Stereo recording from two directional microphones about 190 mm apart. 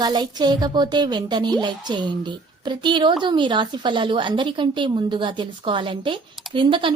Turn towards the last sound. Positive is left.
turn(degrees=-25)  # may be behind; listen again after turning